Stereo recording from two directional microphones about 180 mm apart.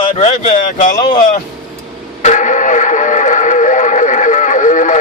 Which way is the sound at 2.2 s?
45° left (ahead or behind).